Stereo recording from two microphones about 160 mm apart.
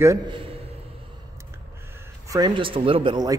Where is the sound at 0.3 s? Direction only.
35° right (ahead or behind).